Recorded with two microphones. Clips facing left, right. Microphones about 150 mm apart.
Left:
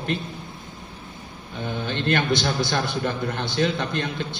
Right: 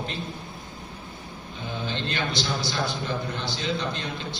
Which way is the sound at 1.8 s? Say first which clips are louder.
Left 6 dB; 55° left (ahead or behind).